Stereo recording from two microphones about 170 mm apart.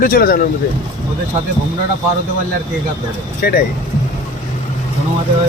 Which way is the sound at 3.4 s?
60° left (ahead or behind).